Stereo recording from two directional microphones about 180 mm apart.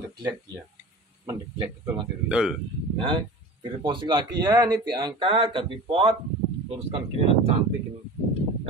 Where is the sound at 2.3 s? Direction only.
5° right (ahead or behind).